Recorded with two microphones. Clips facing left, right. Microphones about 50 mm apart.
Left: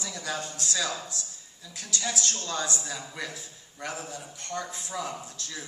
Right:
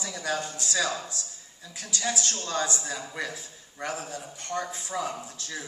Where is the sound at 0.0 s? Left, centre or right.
Centre.